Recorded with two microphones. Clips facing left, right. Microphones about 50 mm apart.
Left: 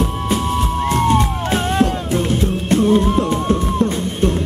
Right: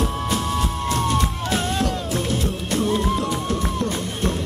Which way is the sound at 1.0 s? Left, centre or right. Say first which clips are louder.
Left 6 dB; left.